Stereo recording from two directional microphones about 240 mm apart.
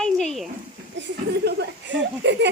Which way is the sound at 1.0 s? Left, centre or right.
Right.